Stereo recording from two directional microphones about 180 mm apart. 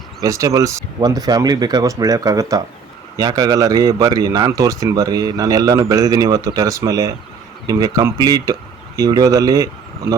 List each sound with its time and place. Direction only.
0.2 s speech: 20° right (ahead or behind)